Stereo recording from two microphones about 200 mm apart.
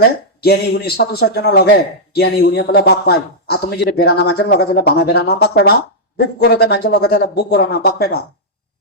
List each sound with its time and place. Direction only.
0.4 s a man's voice: 55° left (ahead or behind)